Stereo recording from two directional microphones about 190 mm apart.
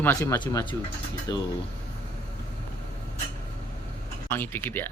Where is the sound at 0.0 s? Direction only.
15° left (ahead or behind).